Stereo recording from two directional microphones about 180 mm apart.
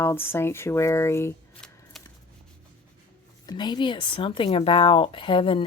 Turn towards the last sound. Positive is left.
turn(degrees=30)  # may be behind; listen again after turning